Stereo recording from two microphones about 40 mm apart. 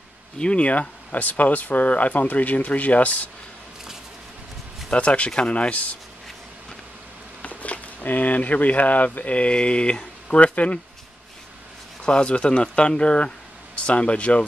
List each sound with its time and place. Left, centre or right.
0.4 s speech: left
4.9 s speech: left
7.4 s speech: left
12.0 s speech: left